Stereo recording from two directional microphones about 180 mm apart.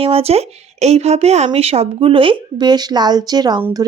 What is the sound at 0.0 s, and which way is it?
Speech, 30° right (ahead or behind).